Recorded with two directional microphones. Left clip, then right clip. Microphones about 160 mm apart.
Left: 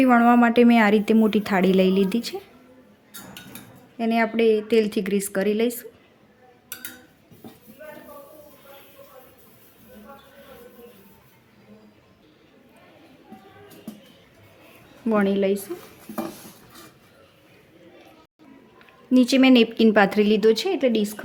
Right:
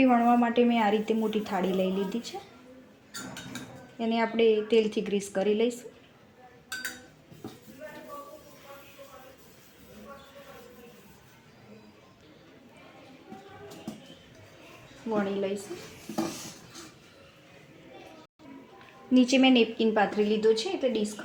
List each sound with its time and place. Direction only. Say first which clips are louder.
0.0 s a woman's voice: left 6 dB; 50° left (ahead or behind)
3.9 s a woman's voice: left 5 dB; 40° left (ahead or behind)
15.1 s a woman's voice: left 8 dB; 90° left
19.1 s speech: left 5 dB; 40° left (ahead or behind); by 21.1 s 90° left